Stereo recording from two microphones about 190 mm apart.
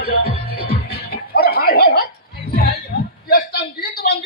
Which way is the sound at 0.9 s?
55° left (ahead or behind).